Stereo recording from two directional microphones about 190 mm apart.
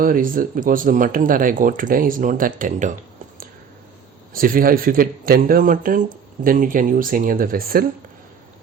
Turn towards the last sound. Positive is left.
turn(degrees=-50)  # may be behind; listen again after turning